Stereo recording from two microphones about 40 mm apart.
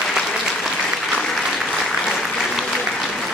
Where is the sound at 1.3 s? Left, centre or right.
Centre.